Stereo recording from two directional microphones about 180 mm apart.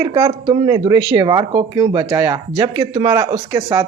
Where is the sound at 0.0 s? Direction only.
20° right (ahead or behind).